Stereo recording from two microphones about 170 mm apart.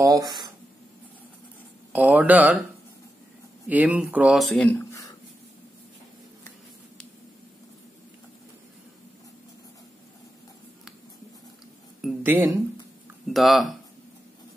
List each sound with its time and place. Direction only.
0.0 s speech: 20° right (ahead or behind)
1.9 s speech: 10° right (ahead or behind)
3.6 s speech: 10° right (ahead or behind); by 4.8 s 5° left (ahead or behind)
12.0 s a sound: 10° right (ahead or behind)
13.3 s speech: centre (ahead or behind)